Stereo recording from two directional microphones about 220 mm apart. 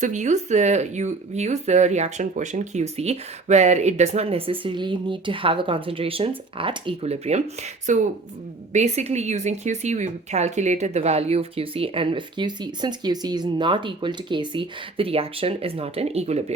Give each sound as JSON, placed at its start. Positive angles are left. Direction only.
{"t": 0.0, "sound": "speech", "side_deg": -35}